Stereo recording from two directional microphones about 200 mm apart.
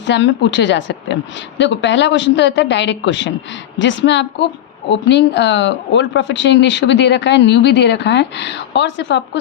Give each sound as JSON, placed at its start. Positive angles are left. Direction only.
{"t": 0.1, "sound": "speech", "side_deg": 65}